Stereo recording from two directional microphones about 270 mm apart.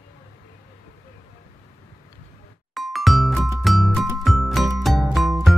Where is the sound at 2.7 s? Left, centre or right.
Centre.